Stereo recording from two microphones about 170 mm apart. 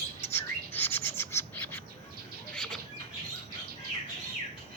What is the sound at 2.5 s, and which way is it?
Bird flight, 5° left (ahead or behind).